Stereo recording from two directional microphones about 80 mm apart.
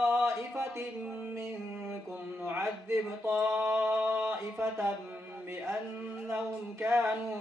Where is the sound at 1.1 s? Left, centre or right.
Centre.